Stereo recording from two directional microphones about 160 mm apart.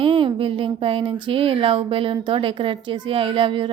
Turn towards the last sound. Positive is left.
turn(degrees=-30)  # may be behind; listen again after turning